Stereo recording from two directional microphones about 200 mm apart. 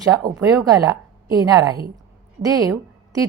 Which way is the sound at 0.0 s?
15° right (ahead or behind).